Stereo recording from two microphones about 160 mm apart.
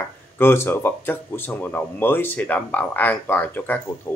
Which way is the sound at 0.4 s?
15° left (ahead or behind).